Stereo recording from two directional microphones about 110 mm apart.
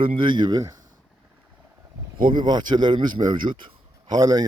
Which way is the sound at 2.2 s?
45° right (ahead or behind).